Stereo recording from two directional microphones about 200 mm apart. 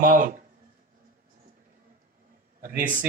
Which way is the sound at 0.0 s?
40° right (ahead or behind).